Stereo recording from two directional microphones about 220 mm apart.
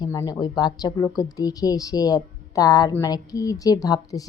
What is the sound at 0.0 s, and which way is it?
A woman's voice, 15° left (ahead or behind).